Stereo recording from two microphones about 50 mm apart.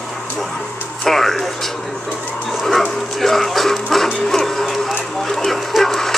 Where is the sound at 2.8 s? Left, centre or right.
Centre.